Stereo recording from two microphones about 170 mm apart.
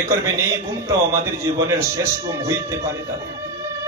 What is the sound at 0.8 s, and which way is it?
A man's voice, 15° right (ahead or behind).